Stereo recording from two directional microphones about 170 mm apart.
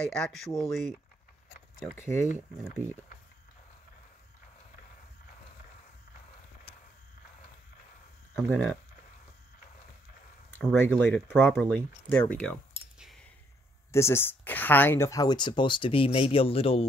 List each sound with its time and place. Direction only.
0.0 s speech: 5° left (ahead or behind)
8.5 s speech: 5° left (ahead or behind)
10.7 s speech: 10° left (ahead or behind)
13.9 s speech: 15° left (ahead or behind); by 16.8 s 35° left (ahead or behind)